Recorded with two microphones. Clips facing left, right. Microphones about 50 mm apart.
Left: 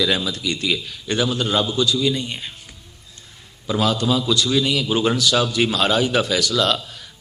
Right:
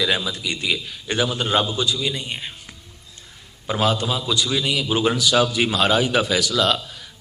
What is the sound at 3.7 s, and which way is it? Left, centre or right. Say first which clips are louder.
Speech: left 2 dB; right.